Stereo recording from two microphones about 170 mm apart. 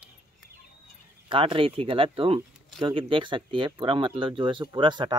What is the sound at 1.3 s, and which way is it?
Speech, 30° right (ahead or behind).